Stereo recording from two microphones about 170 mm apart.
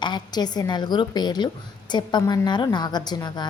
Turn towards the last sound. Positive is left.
turn(degrees=25)  # may be behind; listen again after turning